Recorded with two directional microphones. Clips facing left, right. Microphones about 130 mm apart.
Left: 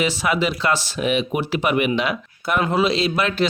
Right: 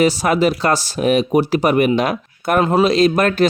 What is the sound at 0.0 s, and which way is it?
Speech, 40° right (ahead or behind).